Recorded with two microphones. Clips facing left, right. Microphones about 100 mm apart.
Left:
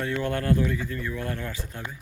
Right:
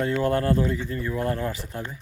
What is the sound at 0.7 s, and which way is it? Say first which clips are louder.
Speech: right 3 dB; 25° right (ahead or behind).